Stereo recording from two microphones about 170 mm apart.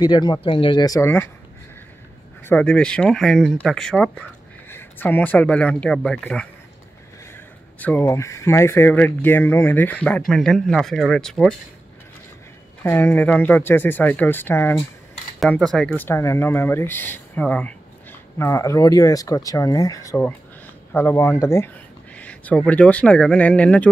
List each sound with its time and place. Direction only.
0.0 s speech: 25° left (ahead or behind)
2.4 s speech: 5° left (ahead or behind)
7.8 s speech: 10° left (ahead or behind)
12.8 s speech: 10° left (ahead or behind)